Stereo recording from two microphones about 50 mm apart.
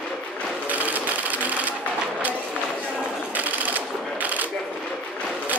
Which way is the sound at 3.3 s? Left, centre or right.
Right.